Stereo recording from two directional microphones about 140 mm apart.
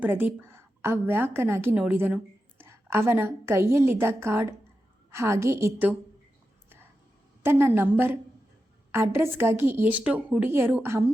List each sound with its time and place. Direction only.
0.0 s a woman's voice: 15° right (ahead or behind)
7.4 s speech: 15° right (ahead or behind)